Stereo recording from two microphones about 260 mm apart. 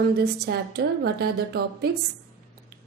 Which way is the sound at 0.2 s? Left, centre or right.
Right.